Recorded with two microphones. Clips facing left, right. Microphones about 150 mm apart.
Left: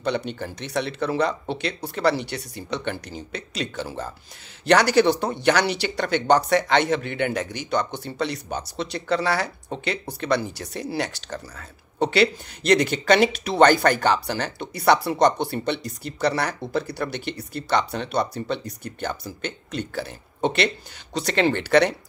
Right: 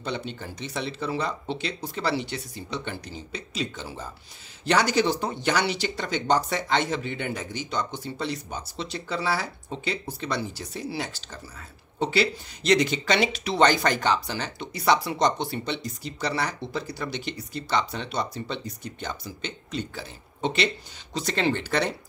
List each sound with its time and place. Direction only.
0.0 s speech: 65° left (ahead or behind)